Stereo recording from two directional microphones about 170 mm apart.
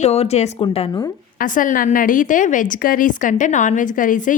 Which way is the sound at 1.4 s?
50° left (ahead or behind).